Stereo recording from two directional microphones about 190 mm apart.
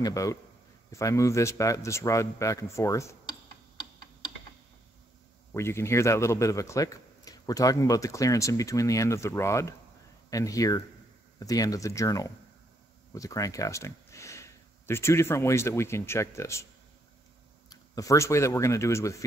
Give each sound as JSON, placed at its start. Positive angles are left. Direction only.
{"t": 0.0, "sound": "a man's voice", "side_deg": 15}
{"t": 5.5, "sound": "a man's voice", "side_deg": 15}
{"t": 17.6, "sound": "speech", "side_deg": 15}